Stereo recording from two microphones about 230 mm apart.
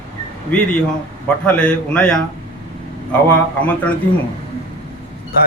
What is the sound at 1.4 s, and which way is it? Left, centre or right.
Speech, centre.